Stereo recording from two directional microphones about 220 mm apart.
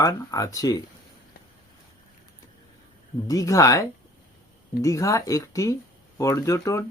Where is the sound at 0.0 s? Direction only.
15° left (ahead or behind).